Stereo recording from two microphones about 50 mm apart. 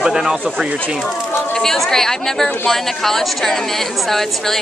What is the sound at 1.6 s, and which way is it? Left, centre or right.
A woman's voice, centre.